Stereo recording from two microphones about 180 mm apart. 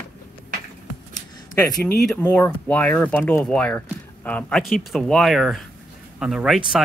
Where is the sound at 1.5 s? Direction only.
15° left (ahead or behind).